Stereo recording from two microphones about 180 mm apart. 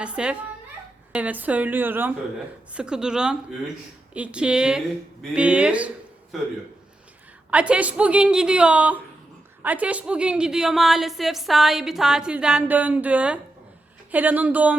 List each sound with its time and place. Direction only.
0.0 s a woman's voice: 5° right (ahead or behind)
7.5 s a woman's voice: 5° right (ahead or behind)